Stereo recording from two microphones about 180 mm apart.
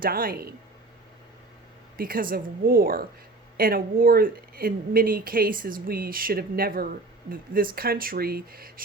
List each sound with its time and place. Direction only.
0.0 s speech: 55° right (ahead or behind)
2.0 s speech: 55° right (ahead or behind)